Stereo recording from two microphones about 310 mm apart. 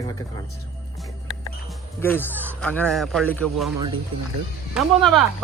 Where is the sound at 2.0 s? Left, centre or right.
Centre.